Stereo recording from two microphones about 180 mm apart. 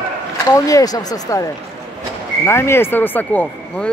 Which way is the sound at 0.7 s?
20° left (ahead or behind).